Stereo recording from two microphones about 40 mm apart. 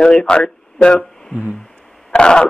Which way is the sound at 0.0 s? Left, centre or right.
Centre.